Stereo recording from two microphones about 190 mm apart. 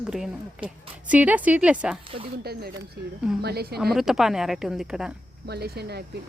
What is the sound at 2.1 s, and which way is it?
Speech, 30° right (ahead or behind).